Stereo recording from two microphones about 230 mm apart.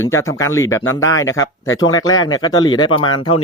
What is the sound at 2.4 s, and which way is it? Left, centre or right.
Speech, centre.